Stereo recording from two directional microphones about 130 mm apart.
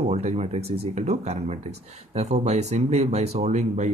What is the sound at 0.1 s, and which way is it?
Speech, 55° right (ahead or behind).